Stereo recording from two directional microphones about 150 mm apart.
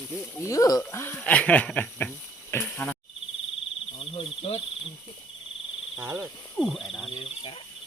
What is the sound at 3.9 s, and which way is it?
Cricket, 40° left (ahead or behind).